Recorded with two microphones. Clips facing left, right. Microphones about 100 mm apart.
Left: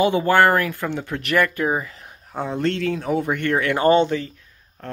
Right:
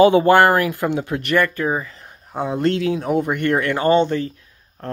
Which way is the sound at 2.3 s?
10° right (ahead or behind).